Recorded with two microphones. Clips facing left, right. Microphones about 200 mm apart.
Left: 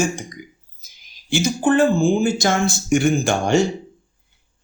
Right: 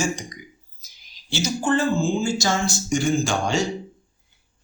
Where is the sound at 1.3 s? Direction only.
55° left (ahead or behind).